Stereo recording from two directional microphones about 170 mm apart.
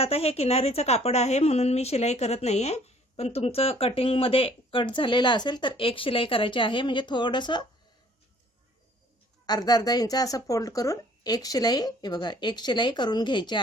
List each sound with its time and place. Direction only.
0.0 s a woman's voice: 35° left (ahead or behind)
9.5 s speech: 25° left (ahead or behind)